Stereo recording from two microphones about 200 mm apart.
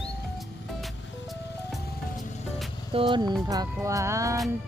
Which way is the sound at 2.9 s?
25° right (ahead or behind).